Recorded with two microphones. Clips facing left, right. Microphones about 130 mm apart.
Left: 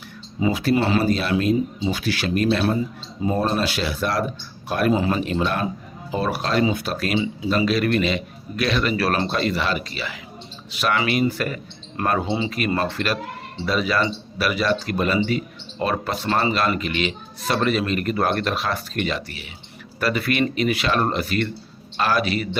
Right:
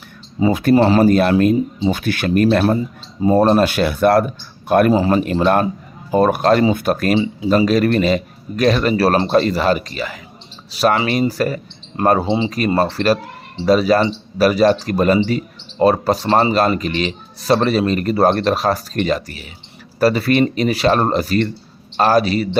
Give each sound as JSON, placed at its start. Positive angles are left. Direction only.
{"t": 0.3, "sound": "speech", "side_deg": -40}
{"t": 4.9, "sound": "a man's voice", "side_deg": -40}
{"t": 5.2, "sound": "a man's voice", "side_deg": -50}